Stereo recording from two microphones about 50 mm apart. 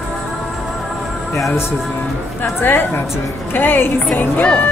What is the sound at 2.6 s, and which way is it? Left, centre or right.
A woman's voice, left.